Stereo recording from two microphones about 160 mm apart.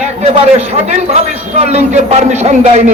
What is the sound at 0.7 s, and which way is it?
A man's voice, 45° right (ahead or behind).